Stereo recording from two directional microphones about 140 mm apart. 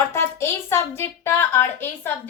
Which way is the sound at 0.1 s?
20° left (ahead or behind).